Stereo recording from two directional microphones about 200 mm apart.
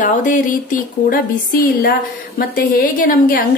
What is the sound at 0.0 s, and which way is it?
Speech, 40° left (ahead or behind).